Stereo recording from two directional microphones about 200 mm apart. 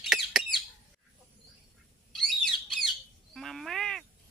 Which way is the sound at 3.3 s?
Centre (ahead or behind).